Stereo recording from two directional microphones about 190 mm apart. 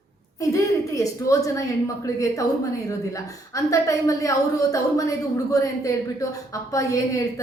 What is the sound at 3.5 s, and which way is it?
Speech, 15° left (ahead or behind).